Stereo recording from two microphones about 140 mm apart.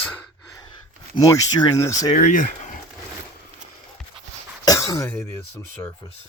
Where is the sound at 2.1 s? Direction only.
70° left (ahead or behind).